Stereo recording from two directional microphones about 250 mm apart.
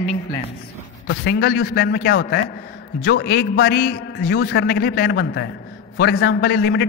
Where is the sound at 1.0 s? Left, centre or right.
Left.